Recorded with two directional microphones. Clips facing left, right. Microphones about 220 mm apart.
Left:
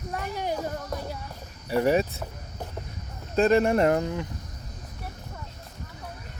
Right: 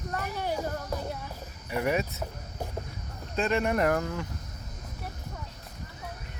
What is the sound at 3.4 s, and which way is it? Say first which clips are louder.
Speech: left 6 dB; 35° left (ahead or behind).